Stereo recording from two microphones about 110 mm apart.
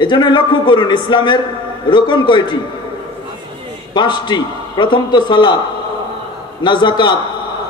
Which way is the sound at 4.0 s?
45° left (ahead or behind).